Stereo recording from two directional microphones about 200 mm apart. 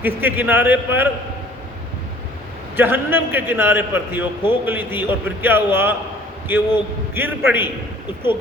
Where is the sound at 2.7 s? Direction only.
10° right (ahead or behind).